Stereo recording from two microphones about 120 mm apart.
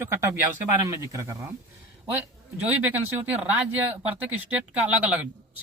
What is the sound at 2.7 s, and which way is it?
Speech, 15° right (ahead or behind).